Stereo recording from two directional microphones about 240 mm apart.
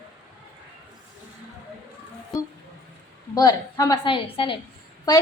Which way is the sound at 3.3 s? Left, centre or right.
Centre.